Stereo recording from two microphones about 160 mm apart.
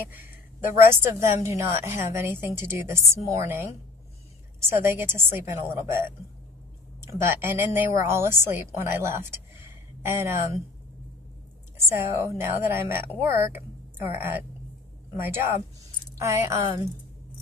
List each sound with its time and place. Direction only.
0.8 s a woman's voice: 15° right (ahead or behind)
11.9 s a woman's voice: 15° right (ahead or behind)